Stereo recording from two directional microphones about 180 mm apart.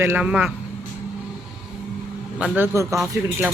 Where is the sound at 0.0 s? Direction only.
10° right (ahead or behind).